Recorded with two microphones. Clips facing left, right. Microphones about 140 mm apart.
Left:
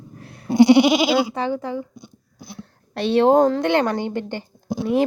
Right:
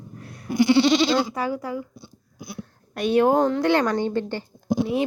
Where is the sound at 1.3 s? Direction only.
30° left (ahead or behind).